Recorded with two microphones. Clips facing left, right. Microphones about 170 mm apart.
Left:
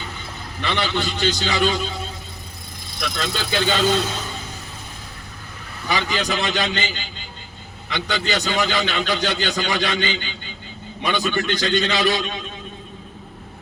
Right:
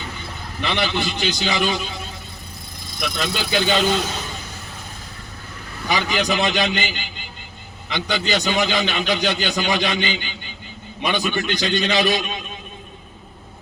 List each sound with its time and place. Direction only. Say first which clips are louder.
0.6 s a man's voice: right 1 dB; 15° right (ahead or behind)
3.2 s a man's voice: right 1 dB; 15° right (ahead or behind)
5.9 s a man's voice: right 2 dB; 15° right (ahead or behind)